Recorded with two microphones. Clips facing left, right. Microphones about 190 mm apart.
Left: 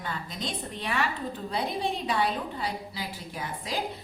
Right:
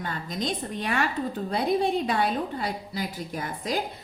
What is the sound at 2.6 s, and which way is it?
A woman's voice, 45° right (ahead or behind).